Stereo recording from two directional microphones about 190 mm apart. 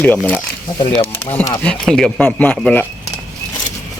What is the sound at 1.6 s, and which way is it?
Speech, centre (ahead or behind).